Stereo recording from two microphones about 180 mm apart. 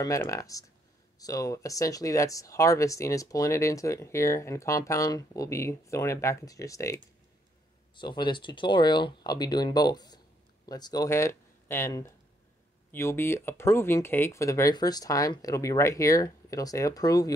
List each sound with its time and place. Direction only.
0.0 s speech: 15° left (ahead or behind)